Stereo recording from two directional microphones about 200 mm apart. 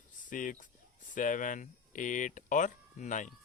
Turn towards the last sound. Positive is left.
turn(degrees=40)  # may be behind; listen again after turning